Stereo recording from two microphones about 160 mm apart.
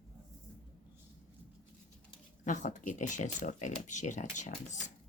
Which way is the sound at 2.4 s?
50° left (ahead or behind).